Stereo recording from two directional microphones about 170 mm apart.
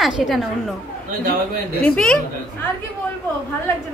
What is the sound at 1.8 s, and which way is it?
Speech, 5° left (ahead or behind).